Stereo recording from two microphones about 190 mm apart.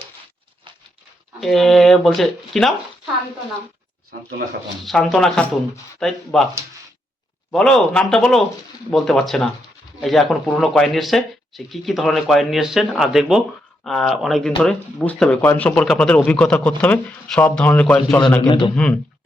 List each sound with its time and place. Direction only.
1.4 s speech: centre (ahead or behind)
4.1 s speech: 65° right (ahead or behind)
4.9 s speech: centre (ahead or behind)
7.5 s speech: 5° left (ahead or behind)
18.4 s a man's voice: 25° left (ahead or behind)